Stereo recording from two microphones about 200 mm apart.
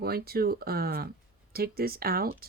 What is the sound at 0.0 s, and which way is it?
Speech, 50° right (ahead or behind).